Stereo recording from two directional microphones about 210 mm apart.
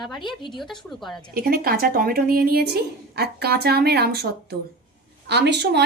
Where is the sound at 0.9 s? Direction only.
Centre (ahead or behind).